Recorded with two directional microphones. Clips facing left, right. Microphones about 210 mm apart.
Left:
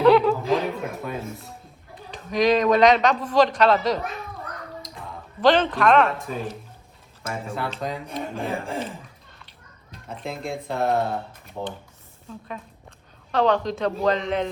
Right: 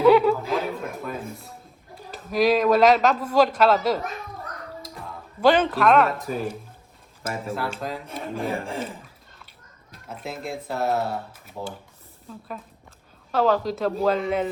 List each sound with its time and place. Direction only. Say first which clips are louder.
0.0 s chuckle: even; 10° right (ahead or behind)
1.3 s a man's voice: left 1 dB; centre (ahead or behind)